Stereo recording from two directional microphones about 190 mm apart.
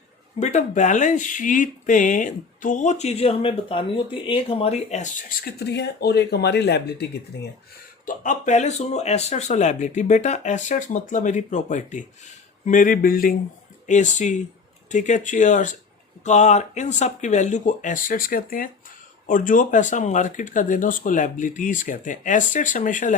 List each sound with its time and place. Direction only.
0.3 s speech: 40° left (ahead or behind); by 7.1 s 60° left (ahead or behind)
8.0 s speech: 40° left (ahead or behind)